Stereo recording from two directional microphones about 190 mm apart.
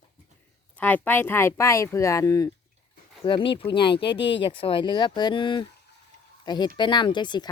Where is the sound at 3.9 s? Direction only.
65° left (ahead or behind).